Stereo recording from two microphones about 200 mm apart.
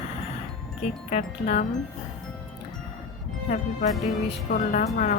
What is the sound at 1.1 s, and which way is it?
Speech, 35° left (ahead or behind).